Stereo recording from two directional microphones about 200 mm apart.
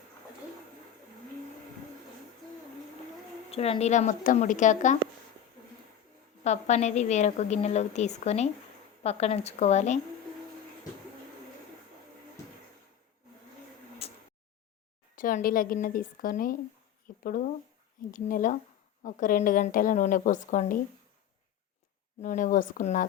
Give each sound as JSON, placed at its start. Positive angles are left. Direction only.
{"t": 3.5, "sound": "a woman's voice", "side_deg": 30}
{"t": 6.4, "sound": "a woman's voice", "side_deg": 35}
{"t": 14.0, "sound": "a sound", "side_deg": 30}
{"t": 15.1, "sound": "a woman's voice", "side_deg": 45}
{"t": 22.2, "sound": "a woman's voice", "side_deg": 40}